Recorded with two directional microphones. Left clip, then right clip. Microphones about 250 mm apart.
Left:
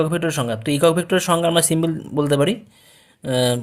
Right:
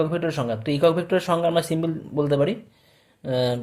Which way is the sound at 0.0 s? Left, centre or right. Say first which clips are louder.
Left 3 dB; left.